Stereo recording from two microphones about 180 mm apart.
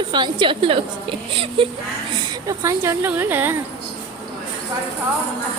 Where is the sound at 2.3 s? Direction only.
20° right (ahead or behind).